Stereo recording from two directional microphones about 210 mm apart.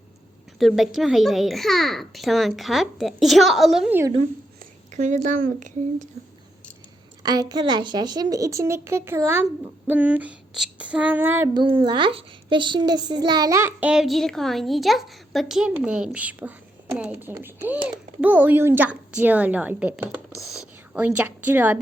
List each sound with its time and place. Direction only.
0.6 s a child's voice: centre (ahead or behind)
4.6 s speech: 35° right (ahead or behind)
7.2 s a child's voice: 20° right (ahead or behind)
11.5 s a child's voice: 25° right (ahead or behind); by 21.8 s 10° right (ahead or behind)